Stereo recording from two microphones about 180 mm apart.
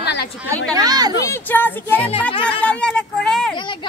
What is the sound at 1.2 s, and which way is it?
Speech, 15° left (ahead or behind).